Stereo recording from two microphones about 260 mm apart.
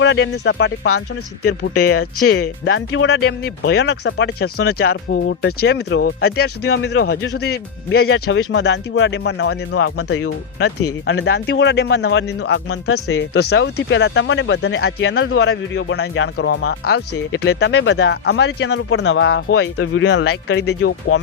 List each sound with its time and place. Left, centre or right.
0.0 s speech: left
1.9 s speech: left
9.7 s speech: left
11.1 s speech: left
17.4 s speech: left